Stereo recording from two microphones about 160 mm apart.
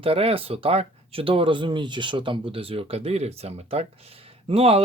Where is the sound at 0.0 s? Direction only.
35° right (ahead or behind).